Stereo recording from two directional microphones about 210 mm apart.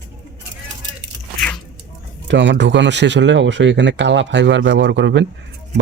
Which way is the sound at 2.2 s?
60° right (ahead or behind).